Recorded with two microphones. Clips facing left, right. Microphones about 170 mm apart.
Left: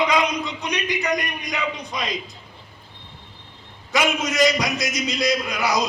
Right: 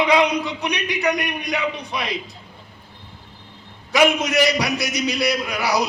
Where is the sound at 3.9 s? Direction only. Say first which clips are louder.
Right 5 dB; 75° right (ahead or behind).